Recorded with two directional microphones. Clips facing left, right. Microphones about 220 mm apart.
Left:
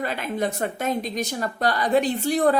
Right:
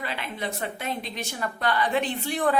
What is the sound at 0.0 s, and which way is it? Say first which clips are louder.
A woman's voice: left 7 dB; 45° left (ahead or behind).